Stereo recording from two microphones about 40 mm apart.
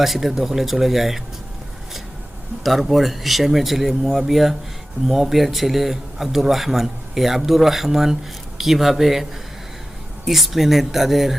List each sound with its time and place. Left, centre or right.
0.0 s speech: centre
2.6 s speech: centre
10.2 s speech: centre